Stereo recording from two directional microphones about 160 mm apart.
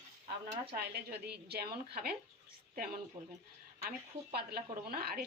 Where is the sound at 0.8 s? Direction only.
85° right.